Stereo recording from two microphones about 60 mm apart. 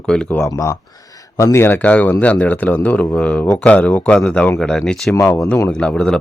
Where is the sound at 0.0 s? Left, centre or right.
Centre.